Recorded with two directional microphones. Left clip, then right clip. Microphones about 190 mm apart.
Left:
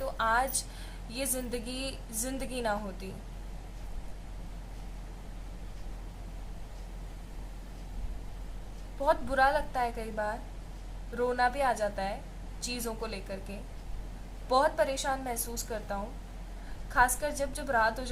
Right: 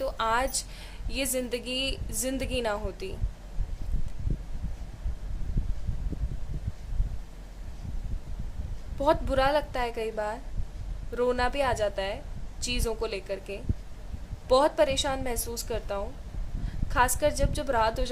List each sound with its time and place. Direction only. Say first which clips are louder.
0.0 s a sound: right 2 dB; 60° right (ahead or behind)
1.1 s speech: right 5 dB; 60° right (ahead or behind)
9.0 s speech: right 2 dB; 60° right (ahead or behind)
14.5 s speech: right 4 dB; 60° right (ahead or behind)